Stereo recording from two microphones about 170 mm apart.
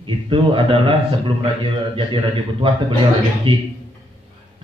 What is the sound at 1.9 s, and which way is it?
A man's voice, 30° right (ahead or behind).